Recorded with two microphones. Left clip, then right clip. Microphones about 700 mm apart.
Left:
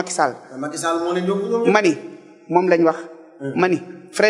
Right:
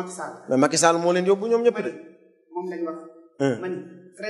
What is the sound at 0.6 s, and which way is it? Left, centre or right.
A man's voice, right.